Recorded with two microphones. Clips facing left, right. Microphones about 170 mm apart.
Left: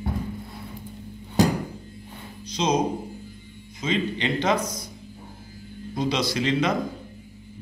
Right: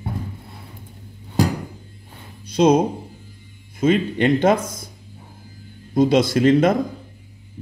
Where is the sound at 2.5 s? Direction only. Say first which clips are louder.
Right 8 dB; 55° right (ahead or behind).